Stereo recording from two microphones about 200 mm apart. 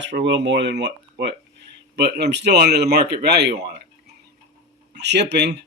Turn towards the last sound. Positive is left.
turn(degrees=-55)  # may be behind; listen again after turning